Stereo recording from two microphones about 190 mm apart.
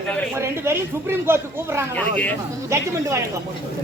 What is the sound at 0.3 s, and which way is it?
Speech, 15° right (ahead or behind).